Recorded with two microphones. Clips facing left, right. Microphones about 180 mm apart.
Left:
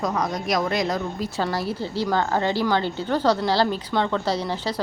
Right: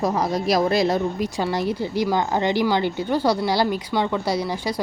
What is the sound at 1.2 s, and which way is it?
A woman's voice, 15° right (ahead or behind).